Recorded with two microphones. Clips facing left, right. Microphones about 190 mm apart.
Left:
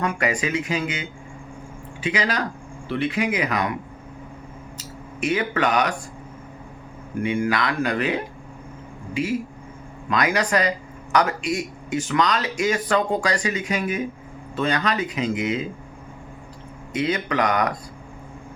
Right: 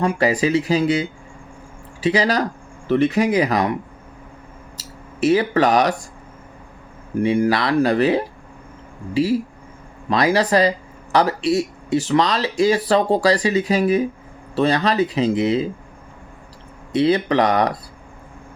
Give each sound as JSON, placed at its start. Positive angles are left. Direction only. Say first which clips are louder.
{"t": 0.0, "sound": "speech", "louder": "right 6 dB", "side_deg": -30}
{"t": 4.8, "sound": "speech", "louder": "right 7 dB", "side_deg": -35}
{"t": 7.2, "sound": "speech", "louder": "right 5 dB", "side_deg": -35}
{"t": 16.9, "sound": "speech", "louder": "right 7 dB", "side_deg": -30}